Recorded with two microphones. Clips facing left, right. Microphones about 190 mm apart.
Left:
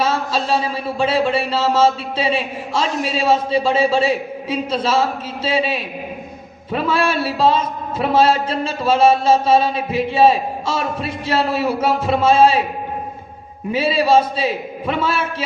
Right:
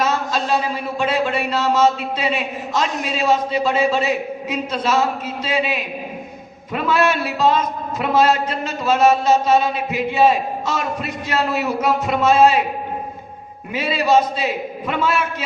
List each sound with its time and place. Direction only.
0.0 s a sound: 30° left (ahead or behind)
6.7 s a man's voice: 30° left (ahead or behind)
13.7 s a man's voice: 30° left (ahead or behind)